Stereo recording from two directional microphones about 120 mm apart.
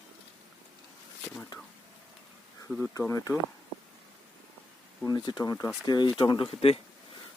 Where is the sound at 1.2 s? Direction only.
10° left (ahead or behind).